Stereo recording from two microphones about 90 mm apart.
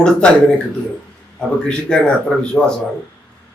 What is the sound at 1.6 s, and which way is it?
A man's voice, 5° left (ahead or behind).